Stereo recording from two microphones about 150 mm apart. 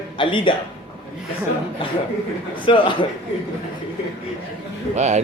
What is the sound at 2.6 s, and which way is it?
Speech, 35° left (ahead or behind).